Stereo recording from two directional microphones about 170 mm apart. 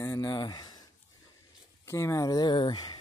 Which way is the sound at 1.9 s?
20° left (ahead or behind).